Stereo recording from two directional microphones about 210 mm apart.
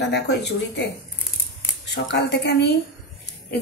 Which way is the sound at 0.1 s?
50° left (ahead or behind).